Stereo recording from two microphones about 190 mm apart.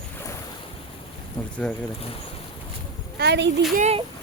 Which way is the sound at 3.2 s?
65° right (ahead or behind).